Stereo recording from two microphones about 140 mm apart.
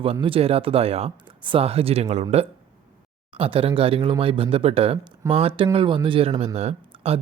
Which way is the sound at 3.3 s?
40° right (ahead or behind).